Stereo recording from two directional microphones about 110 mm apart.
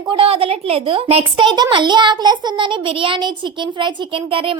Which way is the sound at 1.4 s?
40° right (ahead or behind).